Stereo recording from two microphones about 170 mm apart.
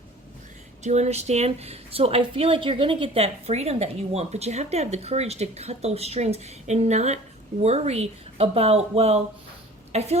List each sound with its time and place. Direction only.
0.9 s a woman's voice: 40° right (ahead or behind)